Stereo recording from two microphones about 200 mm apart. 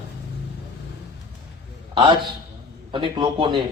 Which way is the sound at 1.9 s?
25° right (ahead or behind).